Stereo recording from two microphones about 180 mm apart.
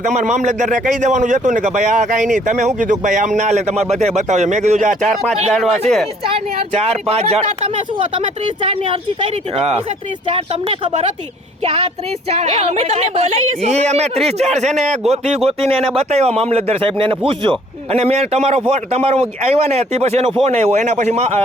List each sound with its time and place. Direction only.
0.0 s a man's voice: 40° right (ahead or behind)
5.3 s speech: centre (ahead or behind)
6.3 s a man's voice: 35° right (ahead or behind)
12.3 s a man's voice: 35° right (ahead or behind)